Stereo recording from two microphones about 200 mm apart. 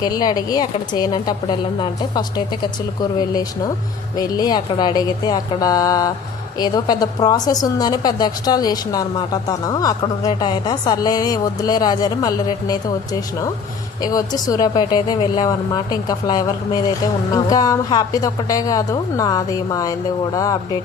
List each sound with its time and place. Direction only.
0.0 s a woman's voice: 20° left (ahead or behind)